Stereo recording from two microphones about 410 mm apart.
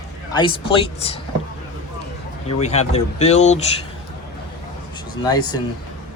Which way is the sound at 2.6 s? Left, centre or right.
Centre.